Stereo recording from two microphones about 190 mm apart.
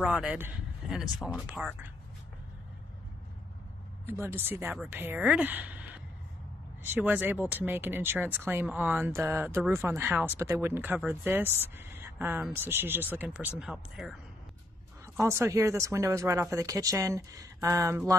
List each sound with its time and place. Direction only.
0.0 s speech: 5° right (ahead or behind)
4.0 s speech: 10° right (ahead or behind)
15.1 s speech: 15° right (ahead or behind)